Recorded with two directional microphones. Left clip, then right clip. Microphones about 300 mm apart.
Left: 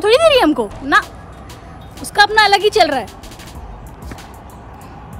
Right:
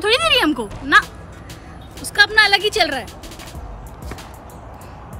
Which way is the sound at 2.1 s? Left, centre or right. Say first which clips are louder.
Left 3 dB; centre.